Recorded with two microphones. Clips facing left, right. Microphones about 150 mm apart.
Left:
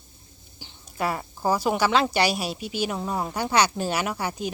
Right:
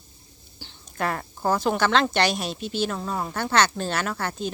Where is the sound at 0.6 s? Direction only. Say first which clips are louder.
Even; 10° left (ahead or behind).